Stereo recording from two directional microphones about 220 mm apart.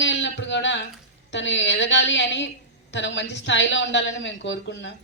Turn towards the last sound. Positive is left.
turn(degrees=55)  # may be behind; listen again after turning